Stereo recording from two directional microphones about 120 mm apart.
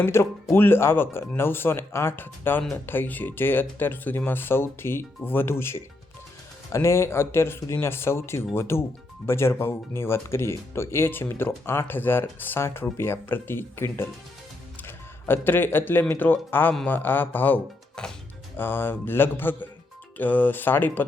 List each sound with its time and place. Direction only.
0.0 s speech: 20° left (ahead or behind)
18.0 s speech: 5° left (ahead or behind)
18.5 s speech: 20° left (ahead or behind)